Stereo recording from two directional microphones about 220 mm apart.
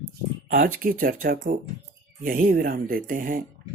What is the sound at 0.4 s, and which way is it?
Speech, 40° right (ahead or behind).